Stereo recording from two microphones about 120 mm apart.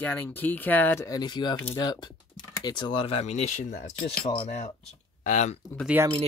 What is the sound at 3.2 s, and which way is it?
Speech, 70° left (ahead or behind).